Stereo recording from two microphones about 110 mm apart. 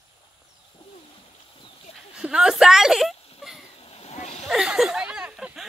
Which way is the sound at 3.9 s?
70° left (ahead or behind).